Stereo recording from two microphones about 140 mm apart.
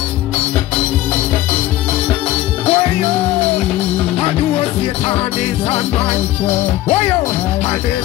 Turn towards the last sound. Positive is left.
turn(degrees=50)  # may be behind; listen again after turning